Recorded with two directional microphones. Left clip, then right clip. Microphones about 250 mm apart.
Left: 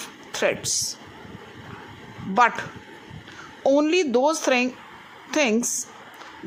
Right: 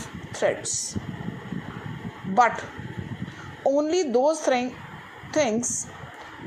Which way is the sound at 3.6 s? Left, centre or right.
Left.